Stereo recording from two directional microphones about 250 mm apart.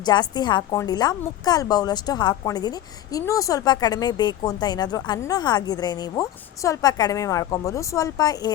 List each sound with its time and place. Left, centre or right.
0.0 s a woman's voice: centre